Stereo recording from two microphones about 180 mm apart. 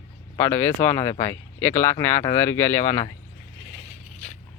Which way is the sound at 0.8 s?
15° left (ahead or behind).